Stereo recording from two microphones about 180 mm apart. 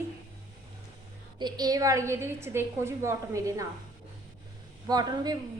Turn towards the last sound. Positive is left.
turn(degrees=-20)  # may be behind; listen again after turning